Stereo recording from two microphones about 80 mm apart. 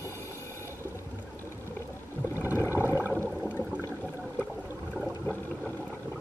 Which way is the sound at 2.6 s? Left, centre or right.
Left.